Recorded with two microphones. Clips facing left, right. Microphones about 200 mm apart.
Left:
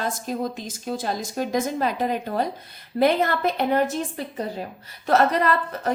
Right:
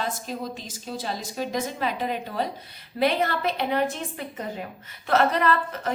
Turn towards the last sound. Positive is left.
turn(degrees=40)  # may be behind; listen again after turning